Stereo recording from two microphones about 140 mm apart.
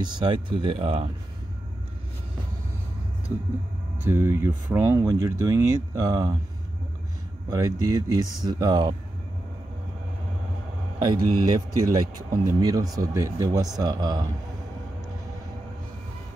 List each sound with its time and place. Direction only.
0.0 s speech: 35° right (ahead or behind)
4.0 s speech: 20° right (ahead or behind)
7.4 s speech: 25° right (ahead or behind)
11.0 s speech: 30° right (ahead or behind)